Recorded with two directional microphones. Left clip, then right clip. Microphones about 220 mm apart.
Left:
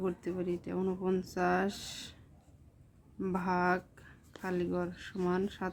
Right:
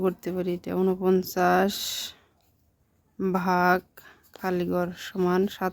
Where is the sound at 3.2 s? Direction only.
50° right (ahead or behind).